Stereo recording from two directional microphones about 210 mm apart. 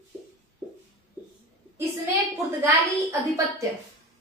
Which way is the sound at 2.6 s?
10° right (ahead or behind).